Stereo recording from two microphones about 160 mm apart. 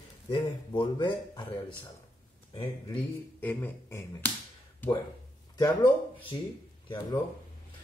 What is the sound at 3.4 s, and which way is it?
Finger snapping, 15° left (ahead or behind).